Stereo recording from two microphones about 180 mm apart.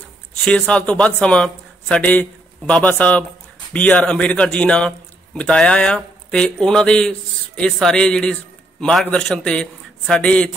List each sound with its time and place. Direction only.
0.5 s a man's voice: 5° left (ahead or behind)